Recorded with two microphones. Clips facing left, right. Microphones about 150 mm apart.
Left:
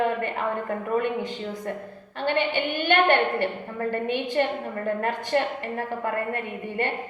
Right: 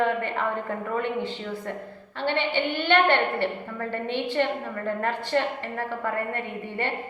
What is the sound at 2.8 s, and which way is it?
A woman's voice, 15° left (ahead or behind).